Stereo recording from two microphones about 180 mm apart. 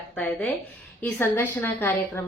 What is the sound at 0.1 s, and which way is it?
A woman's voice, 10° left (ahead or behind).